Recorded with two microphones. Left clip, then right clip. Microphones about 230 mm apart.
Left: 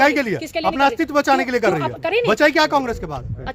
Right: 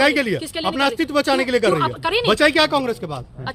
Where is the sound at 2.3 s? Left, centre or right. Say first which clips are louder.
Even; centre.